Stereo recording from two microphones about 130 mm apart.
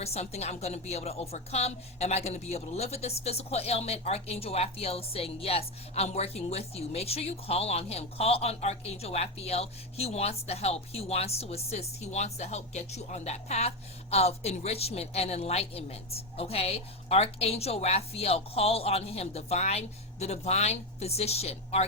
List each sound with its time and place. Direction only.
0.0 s a woman's voice: 55° left (ahead or behind)